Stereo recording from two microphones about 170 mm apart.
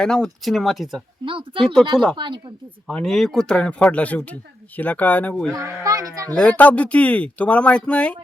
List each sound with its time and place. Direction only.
0.0 s speech: 5° left (ahead or behind)
1.2 s speech: 30° right (ahead or behind)
2.8 s speech: centre (ahead or behind)
5.5 s speech: 20° right (ahead or behind)
6.3 s speech: 5° left (ahead or behind)